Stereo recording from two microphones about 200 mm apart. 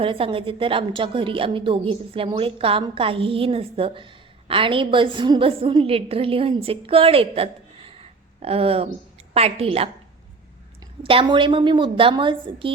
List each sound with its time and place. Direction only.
0.0 s a woman's voice: 25° right (ahead or behind)
11.0 s a woman's voice: 25° right (ahead or behind)